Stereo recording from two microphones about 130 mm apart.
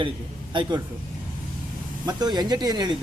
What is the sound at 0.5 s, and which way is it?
Speech, 40° right (ahead or behind).